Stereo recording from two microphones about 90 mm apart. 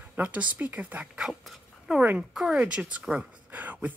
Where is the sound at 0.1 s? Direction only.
15° right (ahead or behind).